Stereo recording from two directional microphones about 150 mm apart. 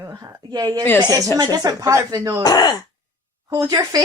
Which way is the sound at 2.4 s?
25° left (ahead or behind).